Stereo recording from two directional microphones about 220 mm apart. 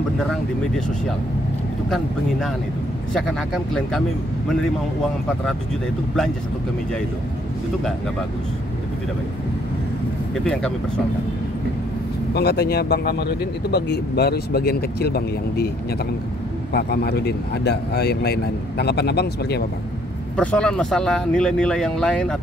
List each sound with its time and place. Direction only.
3.1 s speech: centre (ahead or behind)
10.4 s speech: 5° left (ahead or behind)
12.4 s speech: 45° left (ahead or behind)
16.7 s speech: 45° left (ahead or behind)
20.3 s speech: 5° left (ahead or behind)